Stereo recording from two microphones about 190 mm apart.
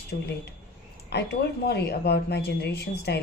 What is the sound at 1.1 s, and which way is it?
A woman's voice, 60° left (ahead or behind).